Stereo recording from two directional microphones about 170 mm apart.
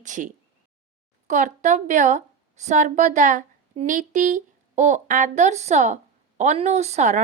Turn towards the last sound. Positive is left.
turn(degrees=-45)  # may be behind; listen again after turning